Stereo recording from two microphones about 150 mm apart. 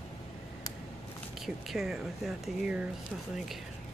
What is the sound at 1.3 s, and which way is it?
Speech, centre (ahead or behind).